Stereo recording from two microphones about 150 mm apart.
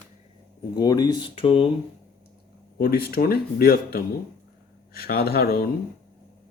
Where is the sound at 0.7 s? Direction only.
25° left (ahead or behind).